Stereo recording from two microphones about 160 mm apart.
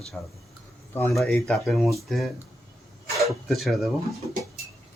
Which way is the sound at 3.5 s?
Centre (ahead or behind).